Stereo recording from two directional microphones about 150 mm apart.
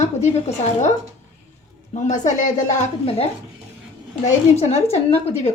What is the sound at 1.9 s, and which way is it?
A woman's voice, 55° left (ahead or behind).